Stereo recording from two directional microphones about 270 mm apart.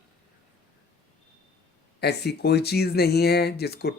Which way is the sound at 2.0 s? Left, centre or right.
Left.